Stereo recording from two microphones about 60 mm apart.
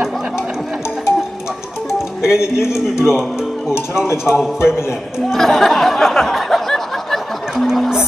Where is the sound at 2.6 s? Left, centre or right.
Left.